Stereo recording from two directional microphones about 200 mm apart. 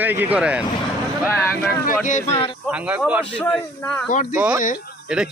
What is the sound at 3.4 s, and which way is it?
Speech, 5° left (ahead or behind).